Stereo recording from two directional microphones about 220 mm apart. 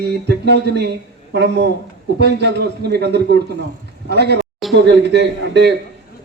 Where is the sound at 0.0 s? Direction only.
50° right (ahead or behind).